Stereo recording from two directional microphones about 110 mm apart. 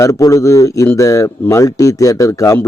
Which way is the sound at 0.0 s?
30° left (ahead or behind).